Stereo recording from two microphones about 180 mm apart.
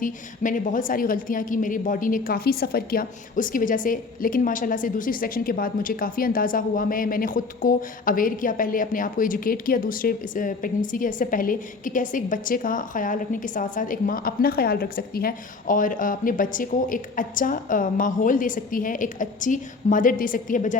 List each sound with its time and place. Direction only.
0.0 s a woman's voice: 45° left (ahead or behind)